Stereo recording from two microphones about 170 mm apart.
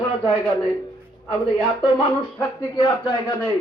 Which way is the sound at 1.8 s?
25° left (ahead or behind).